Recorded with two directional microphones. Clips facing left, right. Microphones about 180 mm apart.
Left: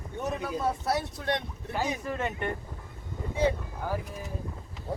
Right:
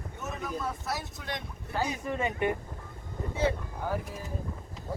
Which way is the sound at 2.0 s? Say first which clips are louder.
Right 2 dB; 10° right (ahead or behind).